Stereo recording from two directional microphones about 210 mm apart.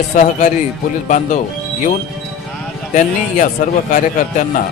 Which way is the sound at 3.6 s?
40° left (ahead or behind).